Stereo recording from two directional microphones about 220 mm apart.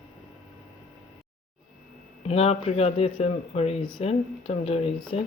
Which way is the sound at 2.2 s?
30° left (ahead or behind).